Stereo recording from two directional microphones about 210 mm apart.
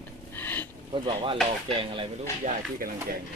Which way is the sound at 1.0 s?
25° right (ahead or behind).